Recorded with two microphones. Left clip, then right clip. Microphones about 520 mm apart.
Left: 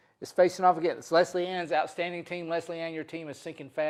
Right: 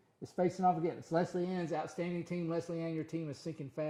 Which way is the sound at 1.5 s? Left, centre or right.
Left.